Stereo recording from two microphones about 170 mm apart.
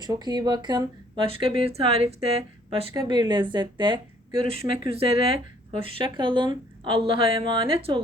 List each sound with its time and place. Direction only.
0.0 s speech: 25° right (ahead or behind)
2.9 s a woman's voice: 25° right (ahead or behind)